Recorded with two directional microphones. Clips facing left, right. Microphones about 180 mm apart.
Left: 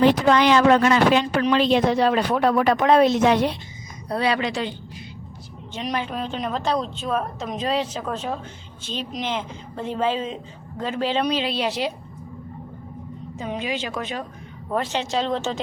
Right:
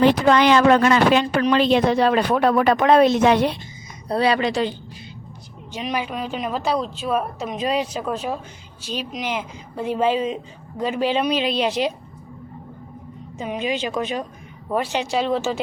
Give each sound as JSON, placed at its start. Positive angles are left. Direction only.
{"t": 0.0, "sound": "speech", "side_deg": -60}
{"t": 4.1, "sound": "speech", "side_deg": -35}
{"t": 5.7, "sound": "a woman's voice", "side_deg": -5}
{"t": 13.4, "sound": "a woman's voice", "side_deg": -20}